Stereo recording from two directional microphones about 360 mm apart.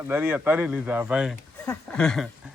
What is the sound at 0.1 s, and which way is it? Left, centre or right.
Speech, centre.